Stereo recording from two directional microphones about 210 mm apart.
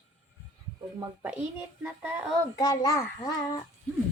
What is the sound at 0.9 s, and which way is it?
Child singing, 10° right (ahead or behind).